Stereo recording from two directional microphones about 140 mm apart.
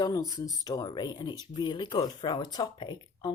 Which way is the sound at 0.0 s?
25° left (ahead or behind).